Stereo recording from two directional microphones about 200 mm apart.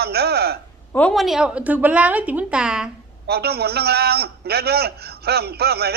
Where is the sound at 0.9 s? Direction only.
5° left (ahead or behind).